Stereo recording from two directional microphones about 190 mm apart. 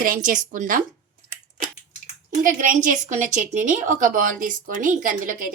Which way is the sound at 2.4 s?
45° right (ahead or behind).